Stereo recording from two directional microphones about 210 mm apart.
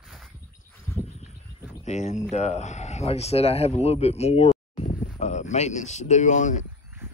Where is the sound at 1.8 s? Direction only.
35° left (ahead or behind).